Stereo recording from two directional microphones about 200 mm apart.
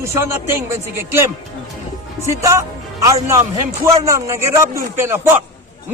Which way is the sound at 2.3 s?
15° right (ahead or behind).